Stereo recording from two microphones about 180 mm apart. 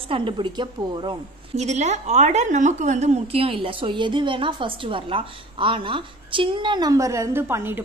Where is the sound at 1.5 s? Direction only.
40° right (ahead or behind).